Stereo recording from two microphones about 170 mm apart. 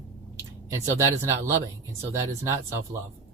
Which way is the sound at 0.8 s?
15° right (ahead or behind).